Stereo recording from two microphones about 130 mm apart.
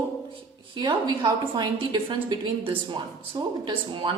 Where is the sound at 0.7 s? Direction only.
35° right (ahead or behind).